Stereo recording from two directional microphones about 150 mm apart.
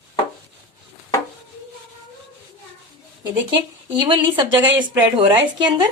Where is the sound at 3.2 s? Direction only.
30° right (ahead or behind).